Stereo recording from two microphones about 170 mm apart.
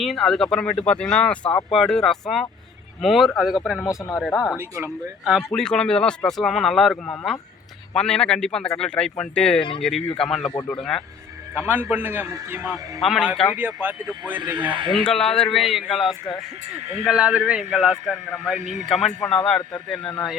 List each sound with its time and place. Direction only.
0.0 s speech: centre (ahead or behind)
3.8 s speech: 15° left (ahead or behind)
4.2 s speech: centre (ahead or behind)
4.5 s speech: 15° right (ahead or behind)
5.2 s speech: 5° right (ahead or behind)
11.7 s speech: 10° right (ahead or behind)
13.0 s speech: centre (ahead or behind)
13.6 s speech: 10° right (ahead or behind)
14.8 s speech: 30° right (ahead or behind)
15.0 s speech: 5° left (ahead or behind)
18.6 s speech: 45° right (ahead or behind)
18.9 s speech: centre (ahead or behind)